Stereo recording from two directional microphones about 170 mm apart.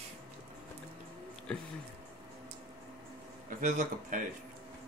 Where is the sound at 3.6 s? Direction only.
50° right (ahead or behind).